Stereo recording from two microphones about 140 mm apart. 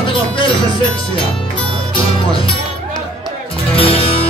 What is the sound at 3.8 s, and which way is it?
Music, 40° left (ahead or behind).